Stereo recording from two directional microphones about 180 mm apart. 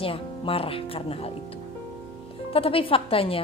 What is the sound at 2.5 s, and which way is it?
Speech, 30° left (ahead or behind).